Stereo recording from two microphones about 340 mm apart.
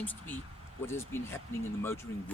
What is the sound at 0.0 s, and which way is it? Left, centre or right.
Speech, centre.